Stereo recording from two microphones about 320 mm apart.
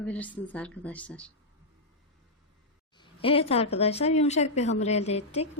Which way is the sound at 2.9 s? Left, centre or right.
Centre.